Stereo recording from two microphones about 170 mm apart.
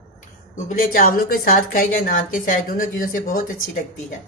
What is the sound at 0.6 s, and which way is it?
A woman's voice, 55° left (ahead or behind).